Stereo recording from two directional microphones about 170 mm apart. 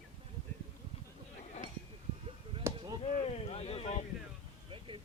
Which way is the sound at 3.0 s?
35° left (ahead or behind).